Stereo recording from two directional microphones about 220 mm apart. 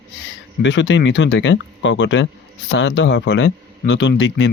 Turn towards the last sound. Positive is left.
turn(degrees=60)  # may be behind; listen again after turning